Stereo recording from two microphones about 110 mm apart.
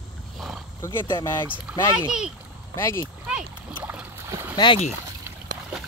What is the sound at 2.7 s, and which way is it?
Speech, 25° left (ahead or behind).